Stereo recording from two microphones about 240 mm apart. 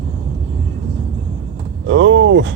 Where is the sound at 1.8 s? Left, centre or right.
Right.